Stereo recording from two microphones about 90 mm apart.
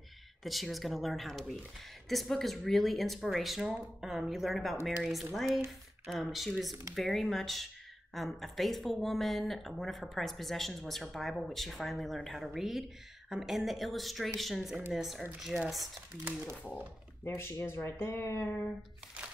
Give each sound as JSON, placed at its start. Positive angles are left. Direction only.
{"t": 0.4, "sound": "speech", "side_deg": 0}
{"t": 17.2, "sound": "speech", "side_deg": 30}